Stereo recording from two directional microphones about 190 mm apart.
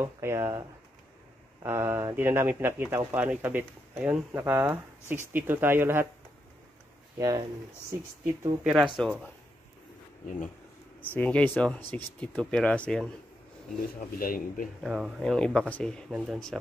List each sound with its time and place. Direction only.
0.0 s speech: 15° right (ahead or behind)
7.2 s speech: 20° right (ahead or behind)
8.6 s speech: 5° right (ahead or behind)
11.0 s speech: 5° left (ahead or behind)
13.7 s speech: 50° left (ahead or behind)
14.8 s speech: centre (ahead or behind)